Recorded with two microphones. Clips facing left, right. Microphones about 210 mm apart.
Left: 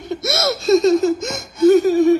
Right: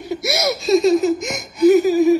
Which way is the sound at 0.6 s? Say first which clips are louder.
Left 1 dB; centre (ahead or behind).